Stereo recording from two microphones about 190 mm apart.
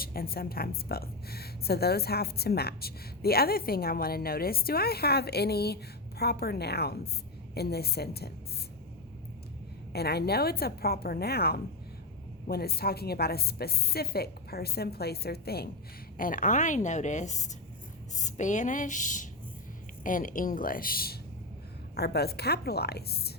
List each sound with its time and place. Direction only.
0.0 s a woman's voice: 50° left (ahead or behind)
9.9 s a woman's voice: 55° left (ahead or behind)